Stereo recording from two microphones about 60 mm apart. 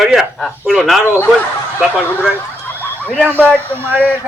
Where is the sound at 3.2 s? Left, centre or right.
Right.